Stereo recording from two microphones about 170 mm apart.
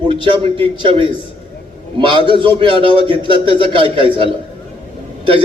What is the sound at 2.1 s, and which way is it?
A man's voice, 30° right (ahead or behind).